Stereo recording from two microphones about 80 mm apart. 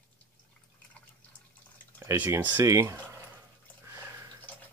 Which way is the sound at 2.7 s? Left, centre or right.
Right.